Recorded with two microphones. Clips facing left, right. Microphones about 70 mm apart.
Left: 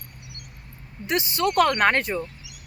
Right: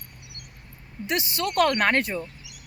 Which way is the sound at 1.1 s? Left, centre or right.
Left.